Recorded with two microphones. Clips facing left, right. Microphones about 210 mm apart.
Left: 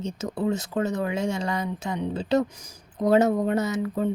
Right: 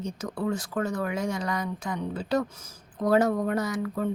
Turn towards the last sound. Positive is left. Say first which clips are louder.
# left 3 dB
turn(degrees=20)  # may be behind; listen again after turning